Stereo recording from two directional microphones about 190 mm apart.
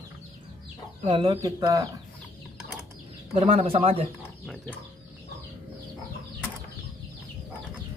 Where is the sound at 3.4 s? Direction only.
30° right (ahead or behind).